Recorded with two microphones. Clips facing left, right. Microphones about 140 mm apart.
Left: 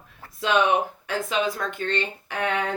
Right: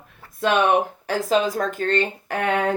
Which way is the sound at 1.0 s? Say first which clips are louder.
Right 5 dB; 40° right (ahead or behind).